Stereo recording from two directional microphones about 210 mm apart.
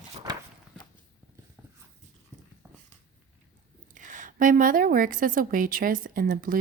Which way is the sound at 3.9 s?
40° right (ahead or behind).